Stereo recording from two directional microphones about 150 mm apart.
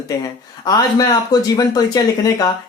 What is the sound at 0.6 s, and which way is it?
Speech, 25° left (ahead or behind).